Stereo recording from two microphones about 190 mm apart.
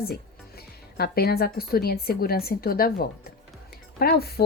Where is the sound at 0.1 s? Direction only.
55° left (ahead or behind).